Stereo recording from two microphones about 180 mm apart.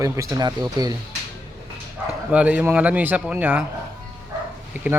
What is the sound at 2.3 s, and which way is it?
Speech, 5° right (ahead or behind).